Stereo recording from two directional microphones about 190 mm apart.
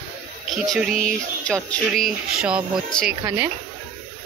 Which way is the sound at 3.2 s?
20° right (ahead or behind).